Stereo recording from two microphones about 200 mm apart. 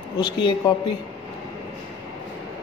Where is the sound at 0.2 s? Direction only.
25° left (ahead or behind).